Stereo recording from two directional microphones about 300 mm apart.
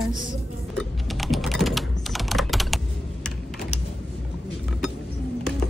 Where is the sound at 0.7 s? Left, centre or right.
Centre.